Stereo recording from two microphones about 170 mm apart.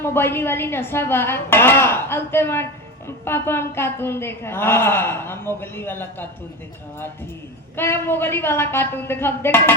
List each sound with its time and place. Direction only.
0.0 s a woman's voice: 15° left (ahead or behind)
7.8 s a woman's voice: 15° left (ahead or behind)